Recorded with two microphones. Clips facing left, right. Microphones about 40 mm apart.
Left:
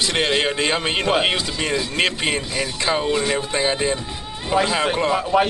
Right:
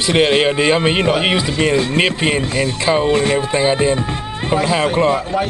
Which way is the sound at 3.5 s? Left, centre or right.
Centre.